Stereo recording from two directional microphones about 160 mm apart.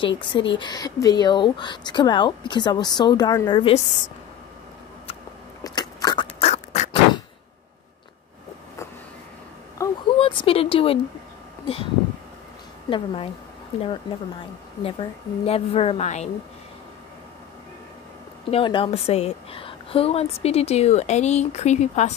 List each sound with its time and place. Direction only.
0.0 s speech: 30° left (ahead or behind)
5.6 s biting: 25° left (ahead or behind)
6.4 s duck: 45° left (ahead or behind)
9.8 s a sound: 20° left (ahead or behind)
10.1 s a sound: 35° left (ahead or behind)
11.6 s speech: 35° left (ahead or behind)
12.9 s a woman's voice: 35° left (ahead or behind)
14.8 s a woman's voice: 35° left (ahead or behind)
18.5 s a woman's voice: 35° left (ahead or behind)